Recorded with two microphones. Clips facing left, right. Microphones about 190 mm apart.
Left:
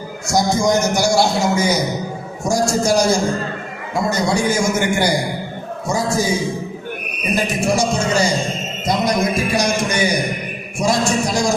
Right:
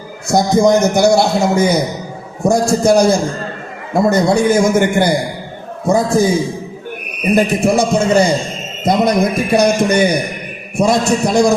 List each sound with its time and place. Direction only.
0.3 s a man's voice: 60° right (ahead or behind)
7.6 s a man's voice: 55° right (ahead or behind)